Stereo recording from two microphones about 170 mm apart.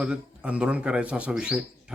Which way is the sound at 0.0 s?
5° right (ahead or behind).